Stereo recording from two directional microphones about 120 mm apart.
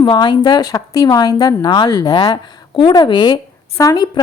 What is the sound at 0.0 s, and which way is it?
Speech, 40° left (ahead or behind).